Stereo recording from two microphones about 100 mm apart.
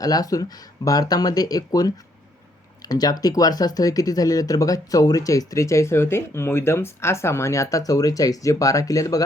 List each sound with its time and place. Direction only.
0.0 s speech: 40° left (ahead or behind)